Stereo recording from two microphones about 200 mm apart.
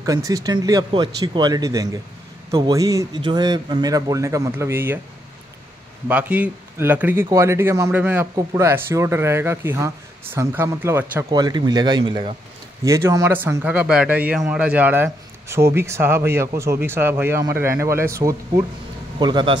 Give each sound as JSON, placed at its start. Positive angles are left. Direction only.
{"t": 0.0, "sound": "a man's voice", "side_deg": -15}
{"t": 6.0, "sound": "a man's voice", "side_deg": -5}
{"t": 12.8, "sound": "a man's voice", "side_deg": -15}